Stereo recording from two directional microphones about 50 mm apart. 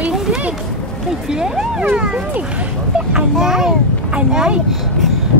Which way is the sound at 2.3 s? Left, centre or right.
Right.